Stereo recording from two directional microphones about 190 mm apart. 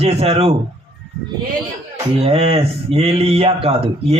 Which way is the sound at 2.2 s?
30° right (ahead or behind).